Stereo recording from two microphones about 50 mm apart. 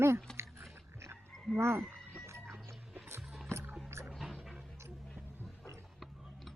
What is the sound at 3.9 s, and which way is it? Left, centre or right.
Music, right.